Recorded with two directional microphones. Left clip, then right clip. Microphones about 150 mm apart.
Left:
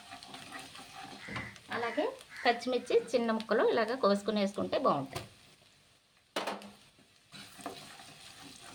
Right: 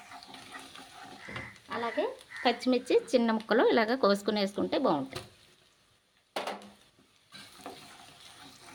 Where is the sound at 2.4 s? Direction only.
40° right (ahead or behind).